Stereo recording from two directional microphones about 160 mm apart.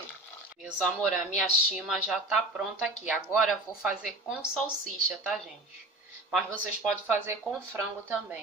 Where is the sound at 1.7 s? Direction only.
5° right (ahead or behind).